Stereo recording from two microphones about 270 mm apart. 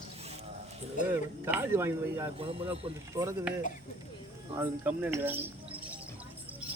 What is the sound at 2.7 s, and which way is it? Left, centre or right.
Speech, centre.